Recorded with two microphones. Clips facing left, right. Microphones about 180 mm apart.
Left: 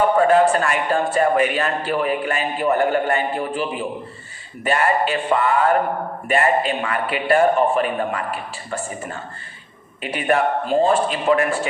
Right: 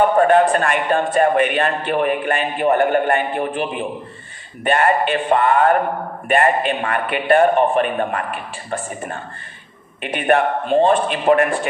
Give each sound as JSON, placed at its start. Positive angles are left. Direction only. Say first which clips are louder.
{"t": 0.5, "sound": "a man's voice", "louder": "right 2 dB", "side_deg": -60}